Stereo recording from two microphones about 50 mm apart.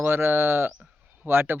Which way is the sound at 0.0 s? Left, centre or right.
Right.